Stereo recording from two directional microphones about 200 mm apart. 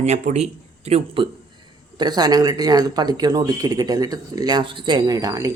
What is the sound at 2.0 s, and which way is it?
Speech, 20° right (ahead or behind).